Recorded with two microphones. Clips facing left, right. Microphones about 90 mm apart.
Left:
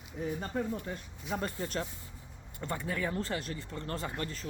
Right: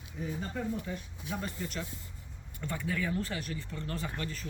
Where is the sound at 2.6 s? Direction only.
35° left (ahead or behind).